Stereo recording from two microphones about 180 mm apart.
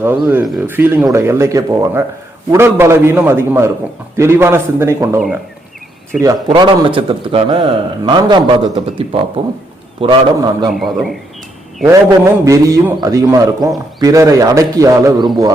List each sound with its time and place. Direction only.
0.0 s a man's voice: 10° right (ahead or behind)
6.5 s a man's voice: 25° right (ahead or behind)
10.8 s a man's voice: centre (ahead or behind)
11.9 s a man's voice: 15° right (ahead or behind)